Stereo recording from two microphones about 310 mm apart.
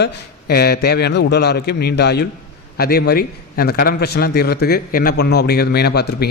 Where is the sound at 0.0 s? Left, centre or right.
Left.